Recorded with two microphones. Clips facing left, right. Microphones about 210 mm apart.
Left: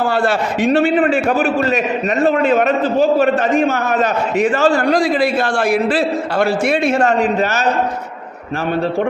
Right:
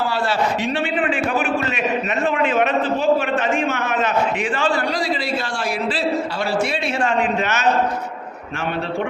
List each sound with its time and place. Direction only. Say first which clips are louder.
0.0 s a man's voice: left 4 dB; 50° left (ahead or behind); by 7.7 s 35° left (ahead or behind)